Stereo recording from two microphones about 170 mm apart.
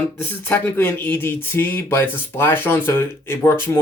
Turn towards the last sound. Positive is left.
turn(degrees=15)  # may be behind; listen again after turning